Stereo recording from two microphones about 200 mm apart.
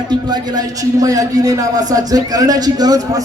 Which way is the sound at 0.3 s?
20° right (ahead or behind).